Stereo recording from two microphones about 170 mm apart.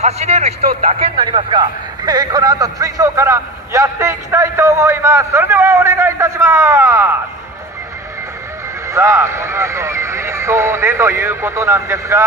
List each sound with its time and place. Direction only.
0.0 s a man's voice: 40° right (ahead or behind); by 7.2 s 15° right (ahead or behind)
8.8 s a man's voice: 15° right (ahead or behind)